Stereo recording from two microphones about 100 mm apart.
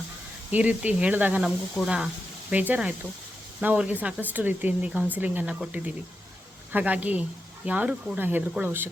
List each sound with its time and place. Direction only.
0.5 s speech: 15° right (ahead or behind)